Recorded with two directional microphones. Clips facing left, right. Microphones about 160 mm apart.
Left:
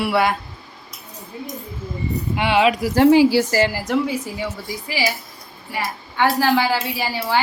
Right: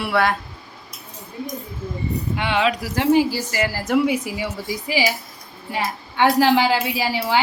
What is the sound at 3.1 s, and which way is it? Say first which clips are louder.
Speech: even; 80° left.